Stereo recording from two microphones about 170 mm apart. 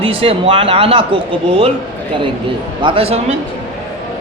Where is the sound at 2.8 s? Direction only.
30° right (ahead or behind).